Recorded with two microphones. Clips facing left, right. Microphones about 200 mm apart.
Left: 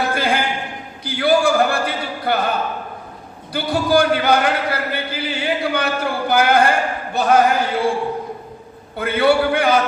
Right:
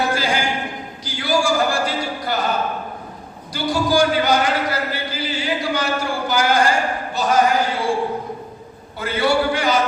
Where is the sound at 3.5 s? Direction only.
60° left (ahead or behind).